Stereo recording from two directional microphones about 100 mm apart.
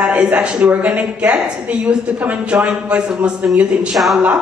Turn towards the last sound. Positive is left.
turn(degrees=-5)  # may be behind; listen again after turning